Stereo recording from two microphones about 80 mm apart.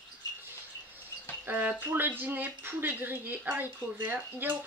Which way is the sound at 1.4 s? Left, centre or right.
Right.